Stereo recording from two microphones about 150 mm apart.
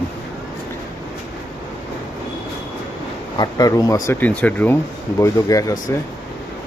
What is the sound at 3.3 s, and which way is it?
Speech, 25° left (ahead or behind).